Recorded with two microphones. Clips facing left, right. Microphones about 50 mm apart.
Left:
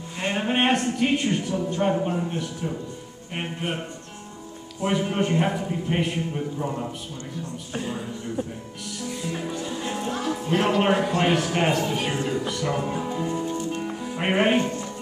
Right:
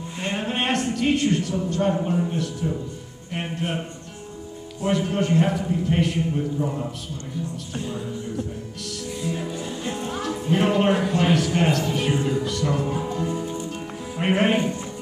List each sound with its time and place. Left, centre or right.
0.2 s a sound: centre
1.7 s a man's voice: centre
4.8 s a man's voice: centre
9.2 s music: centre
10.8 s a man's voice: centre
12.4 s speech: centre
13.7 s music: centre